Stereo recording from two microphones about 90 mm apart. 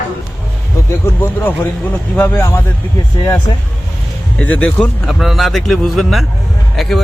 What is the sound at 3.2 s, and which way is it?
Speech, 40° left (ahead or behind).